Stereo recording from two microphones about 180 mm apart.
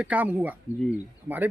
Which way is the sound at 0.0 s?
10° right (ahead or behind).